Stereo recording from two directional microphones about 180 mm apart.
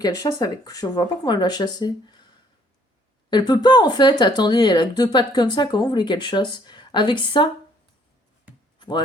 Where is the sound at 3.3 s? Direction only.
25° left (ahead or behind).